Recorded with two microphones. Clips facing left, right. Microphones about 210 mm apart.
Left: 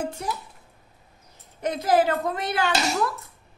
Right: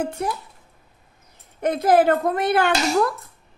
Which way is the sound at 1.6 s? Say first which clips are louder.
Right 4 dB; 55° right (ahead or behind).